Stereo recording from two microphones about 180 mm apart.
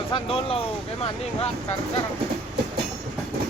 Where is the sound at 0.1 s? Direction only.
30° left (ahead or behind).